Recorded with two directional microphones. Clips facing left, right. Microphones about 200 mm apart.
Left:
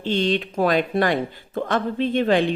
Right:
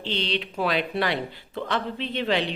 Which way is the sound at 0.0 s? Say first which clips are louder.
Left 7 dB; 45° left (ahead or behind).